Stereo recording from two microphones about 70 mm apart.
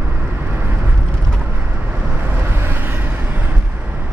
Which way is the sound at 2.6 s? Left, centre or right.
Right.